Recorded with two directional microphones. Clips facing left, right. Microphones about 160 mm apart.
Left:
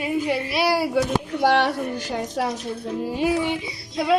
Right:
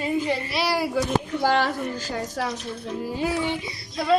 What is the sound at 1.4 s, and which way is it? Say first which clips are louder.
Speech: left 4 dB; 70° left (ahead or behind).